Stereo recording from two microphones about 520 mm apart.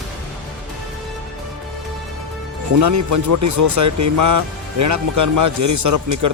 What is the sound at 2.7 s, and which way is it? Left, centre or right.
Speech, right.